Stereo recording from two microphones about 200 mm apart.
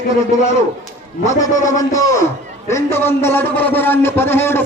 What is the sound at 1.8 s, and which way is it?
A man's voice, 15° left (ahead or behind).